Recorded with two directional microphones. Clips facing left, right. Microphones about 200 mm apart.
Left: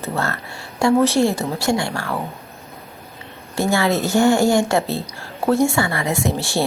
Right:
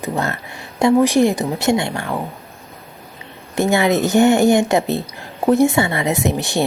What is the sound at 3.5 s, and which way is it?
Speech, 20° right (ahead or behind).